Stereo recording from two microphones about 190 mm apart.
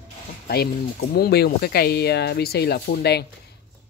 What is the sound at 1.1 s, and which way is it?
Speech, 55° left (ahead or behind).